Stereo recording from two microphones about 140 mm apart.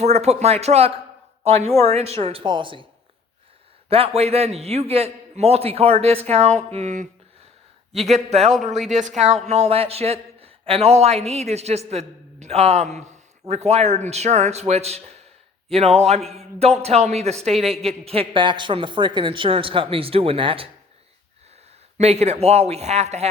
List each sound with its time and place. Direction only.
0.0 s a man's voice: 50° right (ahead or behind)
3.8 s a man's voice: 45° right (ahead or behind)
21.9 s a man's voice: 50° right (ahead or behind)